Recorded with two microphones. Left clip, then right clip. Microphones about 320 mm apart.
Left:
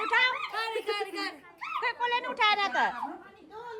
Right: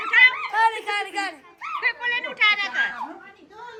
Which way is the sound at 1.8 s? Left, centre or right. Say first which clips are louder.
Right 5 dB; centre.